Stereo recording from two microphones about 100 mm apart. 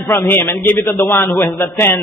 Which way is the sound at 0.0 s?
25° left (ahead or behind).